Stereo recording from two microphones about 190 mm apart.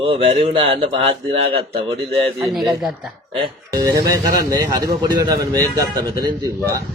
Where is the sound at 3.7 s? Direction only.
20° right (ahead or behind).